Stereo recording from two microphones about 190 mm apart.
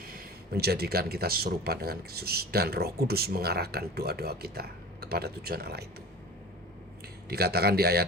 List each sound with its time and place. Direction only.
0.0 s speech: 50° right (ahead or behind)
7.3 s speech: 55° right (ahead or behind)